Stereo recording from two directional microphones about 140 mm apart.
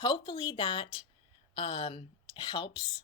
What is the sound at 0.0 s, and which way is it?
Speech, 35° left (ahead or behind).